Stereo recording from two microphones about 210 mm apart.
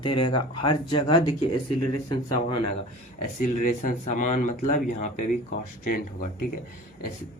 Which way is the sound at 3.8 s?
35° left (ahead or behind).